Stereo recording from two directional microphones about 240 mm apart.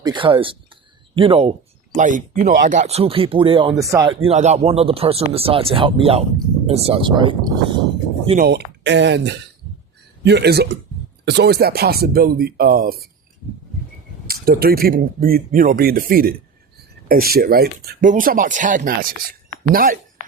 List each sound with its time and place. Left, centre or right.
0.0 s speech: centre
4.2 s speech: right
8.4 s speech: right
14.3 s speech: right